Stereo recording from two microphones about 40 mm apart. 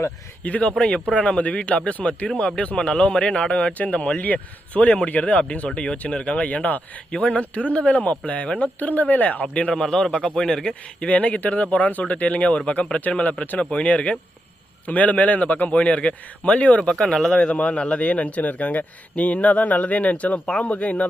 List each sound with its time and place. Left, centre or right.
0.4 s speech: left
0.8 s speech: left
2.2 s speech: left
8.5 s speech: left
9.7 s a man's voice: centre
11.1 s speech: left
16.8 s a man's voice: centre; by 21.1 s left